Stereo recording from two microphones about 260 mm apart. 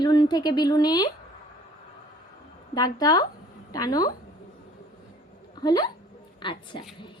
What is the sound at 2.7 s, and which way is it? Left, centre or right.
A woman's voice, centre.